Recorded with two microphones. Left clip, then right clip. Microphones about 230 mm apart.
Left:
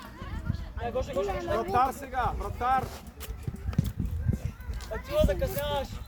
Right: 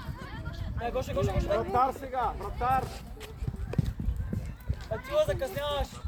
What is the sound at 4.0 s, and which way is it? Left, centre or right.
Clip-clop, right.